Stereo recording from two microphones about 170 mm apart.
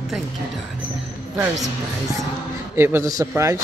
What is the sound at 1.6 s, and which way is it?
Speech, 20° right (ahead or behind).